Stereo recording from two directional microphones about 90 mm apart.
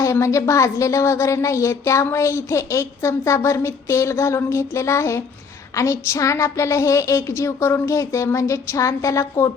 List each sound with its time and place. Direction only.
0.0 s speech: 35° left (ahead or behind)